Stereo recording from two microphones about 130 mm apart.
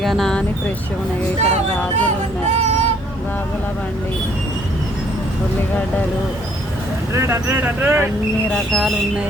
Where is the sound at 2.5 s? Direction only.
60° right (ahead or behind).